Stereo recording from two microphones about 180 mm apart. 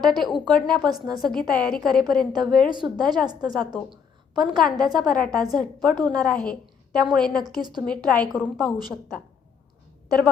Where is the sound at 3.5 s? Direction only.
Centre (ahead or behind).